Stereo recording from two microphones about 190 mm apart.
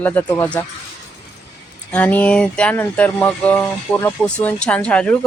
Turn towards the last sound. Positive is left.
turn(degrees=5)  # may be behind; listen again after turning